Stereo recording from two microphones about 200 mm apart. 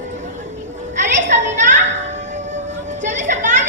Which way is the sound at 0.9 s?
35° right (ahead or behind).